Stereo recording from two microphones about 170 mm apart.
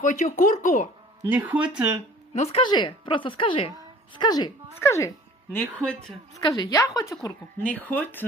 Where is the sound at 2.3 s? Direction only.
40° left (ahead or behind); by 5.1 s 15° left (ahead or behind).